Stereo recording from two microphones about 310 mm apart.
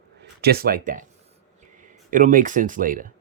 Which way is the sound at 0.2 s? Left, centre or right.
Right.